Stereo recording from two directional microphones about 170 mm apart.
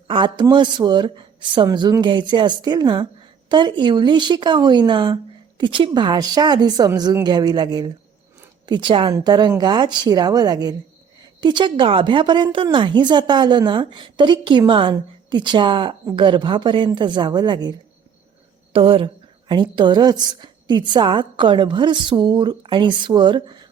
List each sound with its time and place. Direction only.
0.1 s a woman's voice: 25° right (ahead or behind)